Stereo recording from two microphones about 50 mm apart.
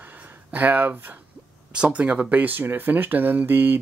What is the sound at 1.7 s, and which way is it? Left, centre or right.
Speech, right.